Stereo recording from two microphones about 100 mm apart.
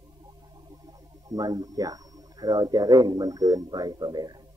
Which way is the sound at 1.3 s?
40° right (ahead or behind).